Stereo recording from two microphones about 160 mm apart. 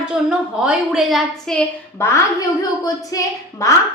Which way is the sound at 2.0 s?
15° left (ahead or behind).